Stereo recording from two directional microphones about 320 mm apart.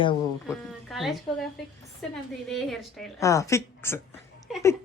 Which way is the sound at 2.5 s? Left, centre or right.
Centre.